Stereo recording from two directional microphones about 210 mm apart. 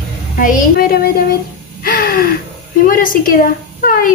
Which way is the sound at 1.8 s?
45° left (ahead or behind).